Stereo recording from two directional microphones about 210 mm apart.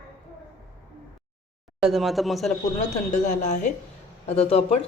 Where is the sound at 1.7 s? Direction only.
Centre (ahead or behind).